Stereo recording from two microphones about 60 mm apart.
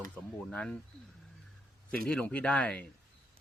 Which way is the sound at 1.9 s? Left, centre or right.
Centre.